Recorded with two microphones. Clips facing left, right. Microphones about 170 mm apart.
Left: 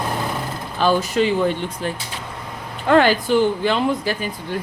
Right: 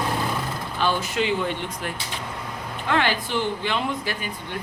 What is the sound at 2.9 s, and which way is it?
Speech, 45° left (ahead or behind).